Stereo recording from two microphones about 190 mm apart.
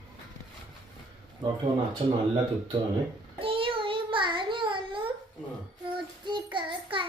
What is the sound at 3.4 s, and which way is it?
Child singing, 30° right (ahead or behind).